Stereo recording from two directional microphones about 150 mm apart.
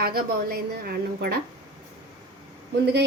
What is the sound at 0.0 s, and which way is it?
A woman's voice, 85° right.